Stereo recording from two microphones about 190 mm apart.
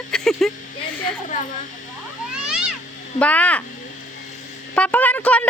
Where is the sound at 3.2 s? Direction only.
5° left (ahead or behind).